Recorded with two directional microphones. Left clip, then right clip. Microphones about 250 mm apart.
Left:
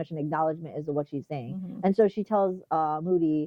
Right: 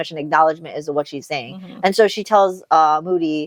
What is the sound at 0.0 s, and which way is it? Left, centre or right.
Speech, centre.